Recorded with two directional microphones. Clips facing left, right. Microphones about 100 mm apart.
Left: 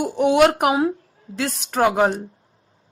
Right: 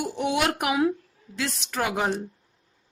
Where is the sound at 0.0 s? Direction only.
50° left (ahead or behind).